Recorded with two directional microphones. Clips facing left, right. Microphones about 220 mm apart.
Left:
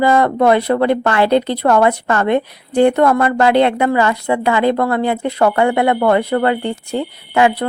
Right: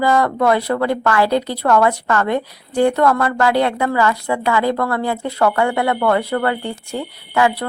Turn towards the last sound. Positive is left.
turn(degrees=20)  # may be behind; listen again after turning